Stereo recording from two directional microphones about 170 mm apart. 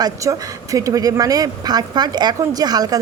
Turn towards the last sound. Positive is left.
turn(degrees=-20)  # may be behind; listen again after turning